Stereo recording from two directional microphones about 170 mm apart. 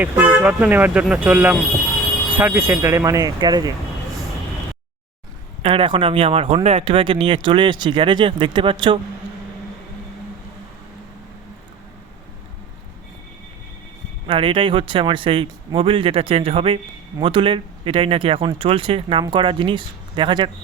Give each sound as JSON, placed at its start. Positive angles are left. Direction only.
{"t": 0.0, "sound": "speech", "side_deg": -10}
{"t": 5.6, "sound": "speech", "side_deg": -30}
{"t": 14.3, "sound": "speech", "side_deg": -30}